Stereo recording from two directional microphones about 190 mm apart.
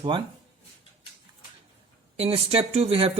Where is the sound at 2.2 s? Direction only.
30° right (ahead or behind).